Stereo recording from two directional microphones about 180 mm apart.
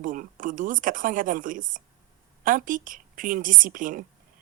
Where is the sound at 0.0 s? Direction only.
50° right (ahead or behind).